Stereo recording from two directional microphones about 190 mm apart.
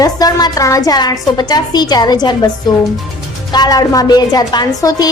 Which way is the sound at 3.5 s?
20° left (ahead or behind).